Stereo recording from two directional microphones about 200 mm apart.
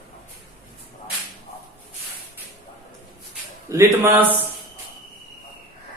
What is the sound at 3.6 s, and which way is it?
Speech, 10° right (ahead or behind).